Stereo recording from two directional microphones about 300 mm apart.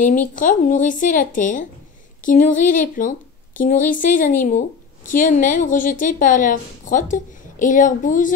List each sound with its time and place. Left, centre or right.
0.0 s a woman's voice: left